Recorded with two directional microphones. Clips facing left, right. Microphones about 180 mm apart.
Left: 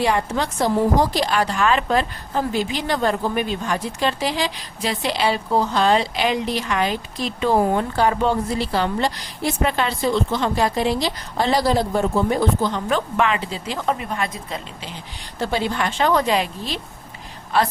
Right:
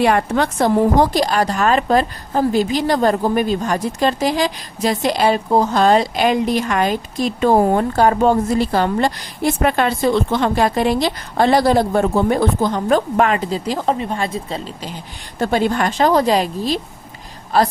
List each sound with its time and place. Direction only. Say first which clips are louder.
0.0 s a woman's voice: right 5 dB; 60° right (ahead or behind); by 14.6 s 30° right (ahead or behind)
15.4 s a woman's voice: right 5 dB; 50° right (ahead or behind)